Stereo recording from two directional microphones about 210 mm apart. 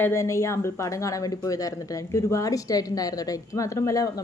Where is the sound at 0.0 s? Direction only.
15° left (ahead or behind).